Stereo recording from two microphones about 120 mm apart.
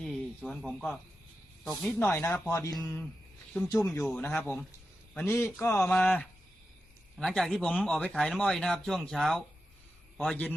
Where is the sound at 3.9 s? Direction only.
15° left (ahead or behind).